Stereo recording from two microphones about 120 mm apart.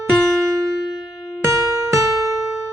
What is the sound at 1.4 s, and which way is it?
Music, 25° right (ahead or behind).